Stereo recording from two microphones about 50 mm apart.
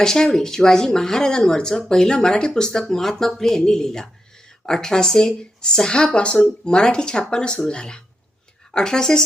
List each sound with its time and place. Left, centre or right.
0.0 s speech: centre